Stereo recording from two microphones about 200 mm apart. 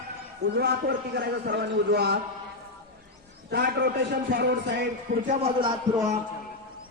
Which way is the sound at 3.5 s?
55° right (ahead or behind).